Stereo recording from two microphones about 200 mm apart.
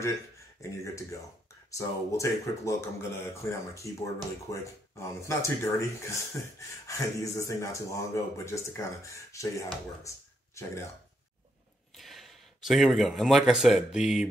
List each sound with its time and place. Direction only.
0.6 s speech: 15° left (ahead or behind)
10.0 s a sound: 15° left (ahead or behind)
12.0 s speech: centre (ahead or behind)